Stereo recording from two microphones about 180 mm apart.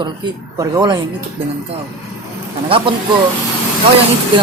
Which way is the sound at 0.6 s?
25° right (ahead or behind).